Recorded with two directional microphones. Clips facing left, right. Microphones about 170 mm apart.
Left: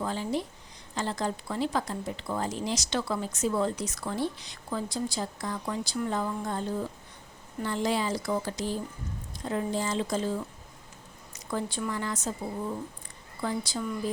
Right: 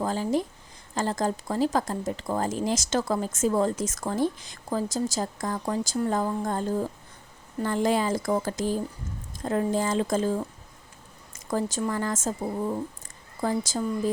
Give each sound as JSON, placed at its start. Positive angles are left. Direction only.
{"t": 0.0, "sound": "speech", "side_deg": -40}